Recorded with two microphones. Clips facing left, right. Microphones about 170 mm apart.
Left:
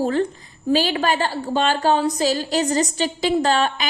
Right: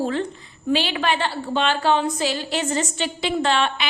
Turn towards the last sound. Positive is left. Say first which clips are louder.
# left 2 dB
turn(degrees=40)  # may be behind; listen again after turning